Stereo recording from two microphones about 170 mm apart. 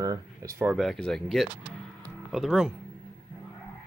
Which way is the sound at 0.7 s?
Centre (ahead or behind).